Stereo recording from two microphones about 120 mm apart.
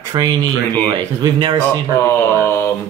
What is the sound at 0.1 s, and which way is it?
A man's voice, 35° right (ahead or behind).